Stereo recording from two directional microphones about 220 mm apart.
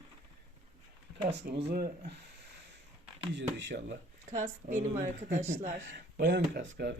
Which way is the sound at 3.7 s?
55° right (ahead or behind).